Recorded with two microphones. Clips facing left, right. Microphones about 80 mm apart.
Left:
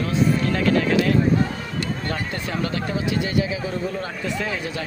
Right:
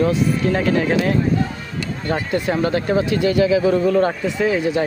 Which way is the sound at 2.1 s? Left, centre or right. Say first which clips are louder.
Right 7 dB; right.